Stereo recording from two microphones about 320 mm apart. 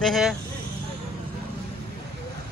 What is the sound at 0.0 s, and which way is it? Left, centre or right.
Speech, centre.